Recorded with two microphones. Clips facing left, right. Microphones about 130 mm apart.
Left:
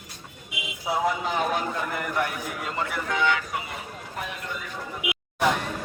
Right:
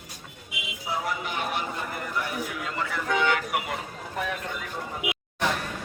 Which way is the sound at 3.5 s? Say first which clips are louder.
Right 3 dB; 90° right.